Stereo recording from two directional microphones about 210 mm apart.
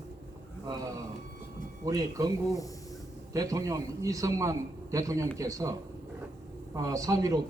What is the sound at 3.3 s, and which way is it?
A man's voice, 15° right (ahead or behind).